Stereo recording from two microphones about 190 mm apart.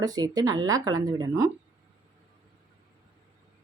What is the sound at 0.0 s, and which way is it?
Speech, 20° right (ahead or behind).